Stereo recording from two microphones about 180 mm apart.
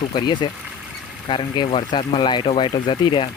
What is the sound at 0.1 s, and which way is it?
Speech, 25° left (ahead or behind).